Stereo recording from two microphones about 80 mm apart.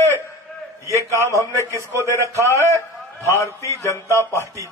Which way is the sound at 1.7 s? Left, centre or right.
Right.